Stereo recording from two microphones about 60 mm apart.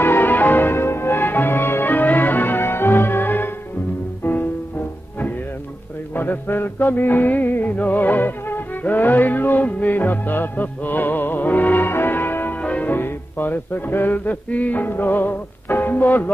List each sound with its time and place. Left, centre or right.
0.0 s music: left
6.1 s music: left
12.5 s music: left
12.9 s music: left